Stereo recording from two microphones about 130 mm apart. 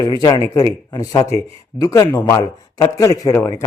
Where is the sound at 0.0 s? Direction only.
30° left (ahead or behind).